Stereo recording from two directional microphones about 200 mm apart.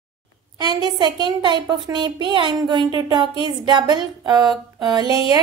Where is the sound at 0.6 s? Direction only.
20° right (ahead or behind).